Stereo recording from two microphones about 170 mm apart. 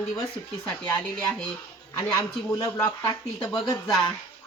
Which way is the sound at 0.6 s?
10° left (ahead or behind).